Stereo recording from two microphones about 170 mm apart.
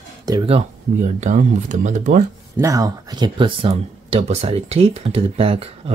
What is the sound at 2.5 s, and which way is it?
Speech, 20° right (ahead or behind).